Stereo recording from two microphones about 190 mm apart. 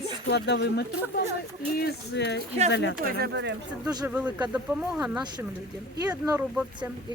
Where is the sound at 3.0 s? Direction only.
60° right (ahead or behind).